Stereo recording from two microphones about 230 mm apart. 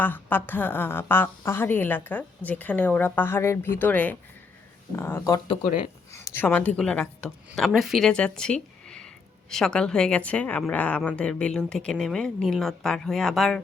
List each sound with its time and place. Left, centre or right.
0.0 s a woman's voice: centre